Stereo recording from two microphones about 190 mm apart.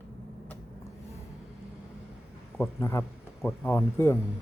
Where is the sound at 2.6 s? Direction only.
15° left (ahead or behind).